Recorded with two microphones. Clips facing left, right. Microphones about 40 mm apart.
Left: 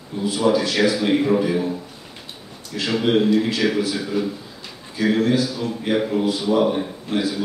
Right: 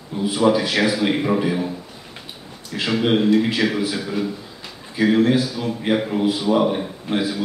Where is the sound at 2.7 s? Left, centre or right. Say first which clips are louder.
Even; centre.